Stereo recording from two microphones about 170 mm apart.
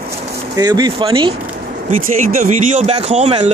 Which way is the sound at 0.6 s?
25° right (ahead or behind).